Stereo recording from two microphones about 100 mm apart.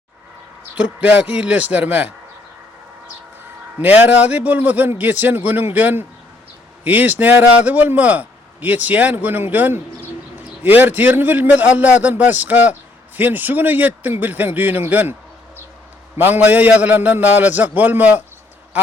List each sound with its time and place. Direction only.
0.8 s a man's voice: 10° right (ahead or behind)
3.8 s a man's voice: 15° right (ahead or behind)
16.1 s a man's voice: 20° right (ahead or behind)